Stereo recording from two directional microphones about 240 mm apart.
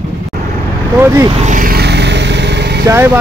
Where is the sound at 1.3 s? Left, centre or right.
Right.